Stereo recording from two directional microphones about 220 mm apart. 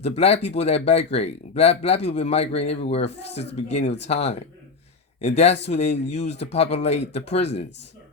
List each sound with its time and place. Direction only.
0.0 s speech: 30° left (ahead or behind)
3.0 s speech: 50° left (ahead or behind)
3.5 s speech: 30° left (ahead or behind)